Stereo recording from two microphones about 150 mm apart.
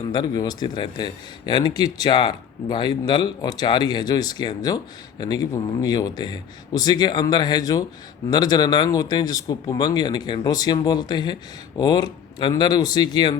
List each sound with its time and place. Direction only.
0.1 s a man's voice: 25° left (ahead or behind)